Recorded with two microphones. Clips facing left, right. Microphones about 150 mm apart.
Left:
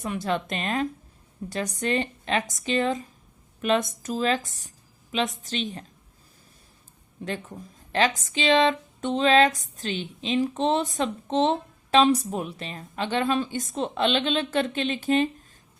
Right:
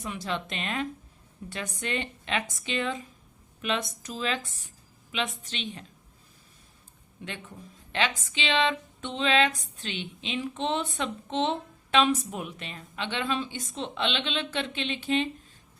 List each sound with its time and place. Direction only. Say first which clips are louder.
0.0 s speech: left 6 dB; 50° left (ahead or behind)
7.2 s speech: left 7 dB; 40° left (ahead or behind)